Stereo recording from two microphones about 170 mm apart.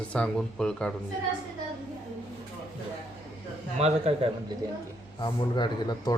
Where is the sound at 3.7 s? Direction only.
35° right (ahead or behind).